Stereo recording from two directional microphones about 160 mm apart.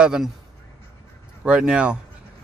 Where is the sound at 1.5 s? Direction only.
5° right (ahead or behind).